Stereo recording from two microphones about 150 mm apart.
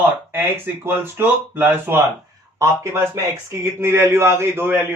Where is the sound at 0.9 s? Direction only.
15° right (ahead or behind).